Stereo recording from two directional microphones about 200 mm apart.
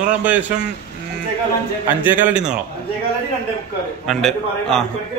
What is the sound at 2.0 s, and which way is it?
Speech, 10° right (ahead or behind).